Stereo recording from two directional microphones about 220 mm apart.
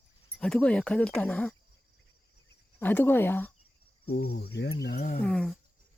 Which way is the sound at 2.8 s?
10° left (ahead or behind).